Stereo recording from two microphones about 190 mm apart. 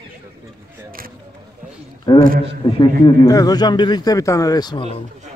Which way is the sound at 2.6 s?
25° left (ahead or behind).